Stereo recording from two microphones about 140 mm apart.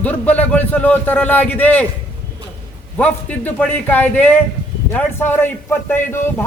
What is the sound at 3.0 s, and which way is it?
A man's voice, 10° left (ahead or behind).